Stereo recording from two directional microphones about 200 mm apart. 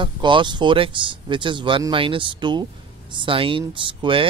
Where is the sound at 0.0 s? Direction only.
25° right (ahead or behind).